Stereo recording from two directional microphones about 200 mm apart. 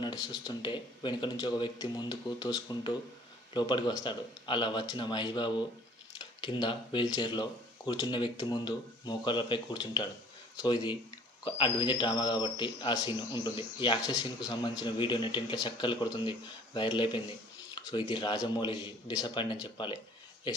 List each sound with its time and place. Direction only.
0.0 s speech: 20° left (ahead or behind)